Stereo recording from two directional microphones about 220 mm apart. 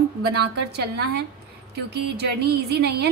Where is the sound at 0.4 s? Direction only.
50° right (ahead or behind).